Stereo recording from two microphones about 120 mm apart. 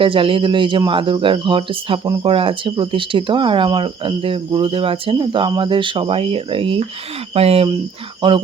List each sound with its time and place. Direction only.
0.0 s speech: 45° right (ahead or behind)
8.2 s speech: 40° right (ahead or behind)